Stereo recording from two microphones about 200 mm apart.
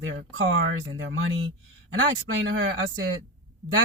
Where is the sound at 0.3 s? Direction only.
75° right (ahead or behind).